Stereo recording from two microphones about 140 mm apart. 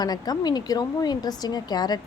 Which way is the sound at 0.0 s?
30° left (ahead or behind).